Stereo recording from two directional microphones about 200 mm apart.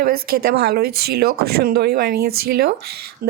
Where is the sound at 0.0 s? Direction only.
50° right (ahead or behind).